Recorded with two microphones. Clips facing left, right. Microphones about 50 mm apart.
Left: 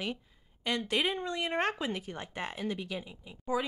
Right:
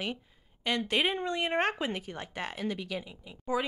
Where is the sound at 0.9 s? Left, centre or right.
Right.